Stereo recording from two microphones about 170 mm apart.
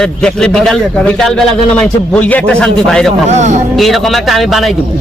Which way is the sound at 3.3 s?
45° right (ahead or behind).